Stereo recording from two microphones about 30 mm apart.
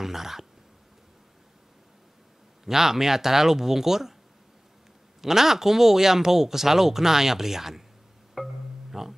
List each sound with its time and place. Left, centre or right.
0.0 s speech: centre
2.6 s speech: centre
5.2 s speech: centre
8.4 s music: centre
8.9 s speech: centre